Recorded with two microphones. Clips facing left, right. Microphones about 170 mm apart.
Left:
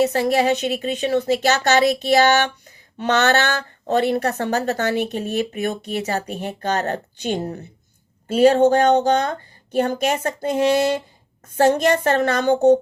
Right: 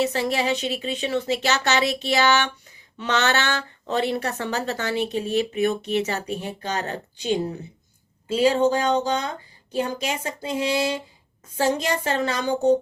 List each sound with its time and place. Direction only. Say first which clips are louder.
0.0 s speech: left 5 dB; 45° left (ahead or behind)